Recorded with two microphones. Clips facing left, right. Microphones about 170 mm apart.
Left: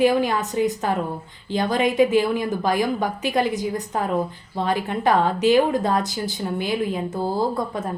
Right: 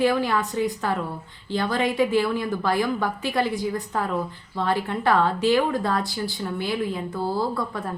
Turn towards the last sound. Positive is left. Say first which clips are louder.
# left 3 dB
turn(degrees=20)  # may be behind; listen again after turning